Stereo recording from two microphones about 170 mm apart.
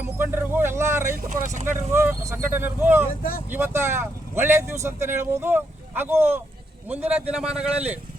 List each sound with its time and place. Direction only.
0.2 s vehicle: 10° right (ahead or behind)
1.5 s speech: 45° right (ahead or behind)
1.7 s speech: 15° right (ahead or behind)